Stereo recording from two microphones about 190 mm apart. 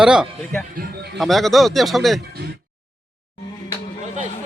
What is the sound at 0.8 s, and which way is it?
Speech, 60° right (ahead or behind).